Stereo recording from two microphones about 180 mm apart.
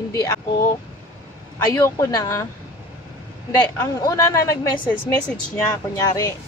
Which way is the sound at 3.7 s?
20° left (ahead or behind).